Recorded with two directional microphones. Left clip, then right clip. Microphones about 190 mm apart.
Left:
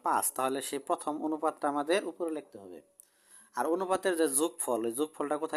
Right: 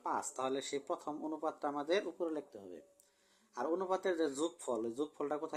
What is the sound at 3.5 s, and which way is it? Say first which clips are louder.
Speech: left 6 dB; 35° left (ahead or behind).